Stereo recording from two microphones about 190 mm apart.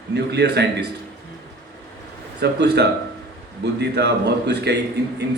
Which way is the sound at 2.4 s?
60° right (ahead or behind).